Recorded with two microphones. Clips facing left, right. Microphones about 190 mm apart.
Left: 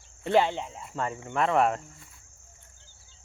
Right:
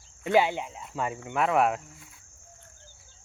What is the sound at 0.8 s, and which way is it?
Speech, 10° right (ahead or behind).